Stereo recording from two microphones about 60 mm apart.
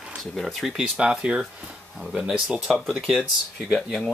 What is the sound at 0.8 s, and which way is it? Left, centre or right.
Speech, centre.